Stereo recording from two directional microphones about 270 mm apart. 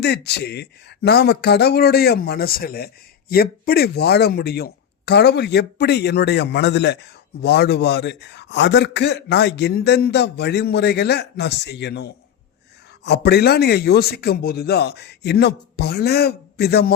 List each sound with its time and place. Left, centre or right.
0.0 s speech: left